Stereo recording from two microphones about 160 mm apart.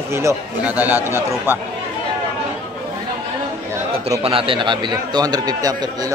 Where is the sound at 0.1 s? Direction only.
15° right (ahead or behind).